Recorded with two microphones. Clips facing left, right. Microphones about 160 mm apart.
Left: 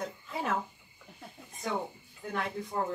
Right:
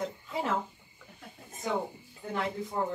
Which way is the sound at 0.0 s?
20° right (ahead or behind).